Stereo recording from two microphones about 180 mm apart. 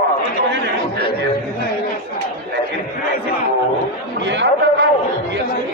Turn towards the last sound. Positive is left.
turn(degrees=-75)  # may be behind; listen again after turning